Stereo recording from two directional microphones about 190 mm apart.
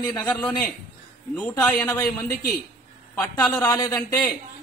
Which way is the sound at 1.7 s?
5° left (ahead or behind).